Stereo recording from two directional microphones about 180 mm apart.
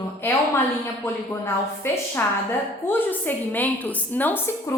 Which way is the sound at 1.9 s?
15° left (ahead or behind).